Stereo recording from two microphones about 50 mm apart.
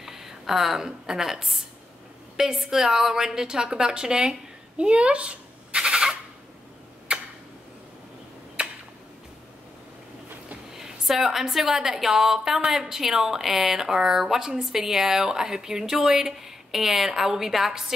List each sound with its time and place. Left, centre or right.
0.0 s a woman's voice: centre
7.1 s tick-tock: right
8.6 s a sound: right
10.7 s a woman's voice: centre